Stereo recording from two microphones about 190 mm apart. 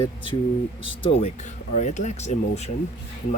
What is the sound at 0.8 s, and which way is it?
Speech, 30° left (ahead or behind).